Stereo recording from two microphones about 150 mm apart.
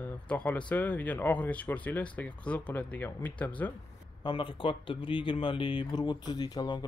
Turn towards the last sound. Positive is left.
turn(degrees=25)  # may be behind; listen again after turning